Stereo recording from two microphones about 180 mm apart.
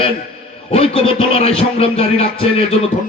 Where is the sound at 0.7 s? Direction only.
30° left (ahead or behind).